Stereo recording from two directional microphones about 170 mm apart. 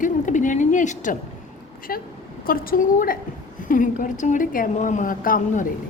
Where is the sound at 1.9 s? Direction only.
60° left (ahead or behind).